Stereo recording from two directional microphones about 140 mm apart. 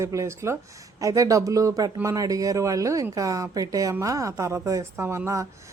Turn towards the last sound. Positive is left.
turn(degrees=-20)  # may be behind; listen again after turning